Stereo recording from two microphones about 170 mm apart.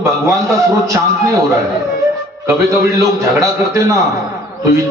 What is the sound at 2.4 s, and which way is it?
A man's voice, 15° right (ahead or behind).